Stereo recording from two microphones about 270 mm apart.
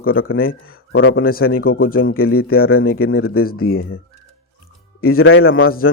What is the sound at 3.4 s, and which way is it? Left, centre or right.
Speech, left.